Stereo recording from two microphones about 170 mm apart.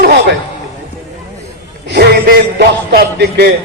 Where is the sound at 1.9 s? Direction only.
70° right (ahead or behind).